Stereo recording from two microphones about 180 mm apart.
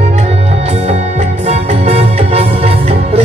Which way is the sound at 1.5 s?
35° right (ahead or behind).